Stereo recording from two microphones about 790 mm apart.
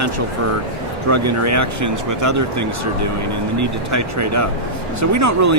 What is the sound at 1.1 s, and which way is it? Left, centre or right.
Speech, centre.